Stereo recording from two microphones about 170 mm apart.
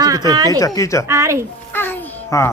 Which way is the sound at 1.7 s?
10° left (ahead or behind).